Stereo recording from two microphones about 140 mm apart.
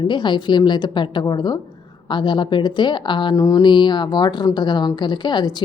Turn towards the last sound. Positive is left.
turn(degrees=30)  # may be behind; listen again after turning